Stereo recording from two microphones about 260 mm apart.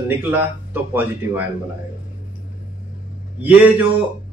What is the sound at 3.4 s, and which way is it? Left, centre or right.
Speech, centre.